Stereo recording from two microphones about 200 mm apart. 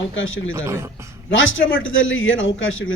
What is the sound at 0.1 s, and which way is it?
Speech, 75° left (ahead or behind).